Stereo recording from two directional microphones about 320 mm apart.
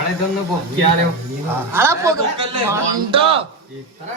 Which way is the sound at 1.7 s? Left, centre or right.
Centre.